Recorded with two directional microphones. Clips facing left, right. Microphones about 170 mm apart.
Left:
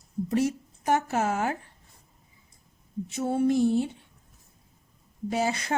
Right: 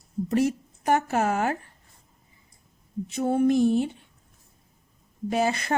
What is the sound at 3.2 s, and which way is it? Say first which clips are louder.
Speech: right 2 dB; 55° right (ahead or behind).